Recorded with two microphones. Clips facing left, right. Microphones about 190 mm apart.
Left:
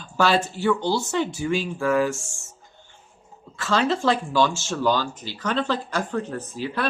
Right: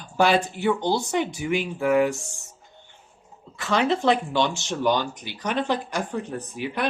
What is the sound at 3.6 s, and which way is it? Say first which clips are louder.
Speech: even; 20° right (ahead or behind).